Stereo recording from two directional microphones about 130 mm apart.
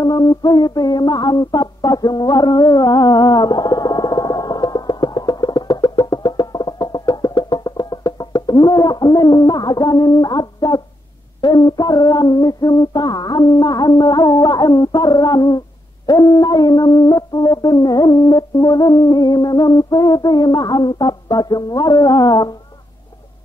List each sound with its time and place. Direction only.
0.0 s music: 30° left (ahead or behind)
11.4 s a sound: 30° left (ahead or behind)
16.1 s music: 30° left (ahead or behind)